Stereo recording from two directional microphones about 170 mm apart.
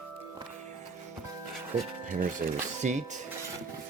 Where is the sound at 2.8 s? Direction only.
45° right (ahead or behind).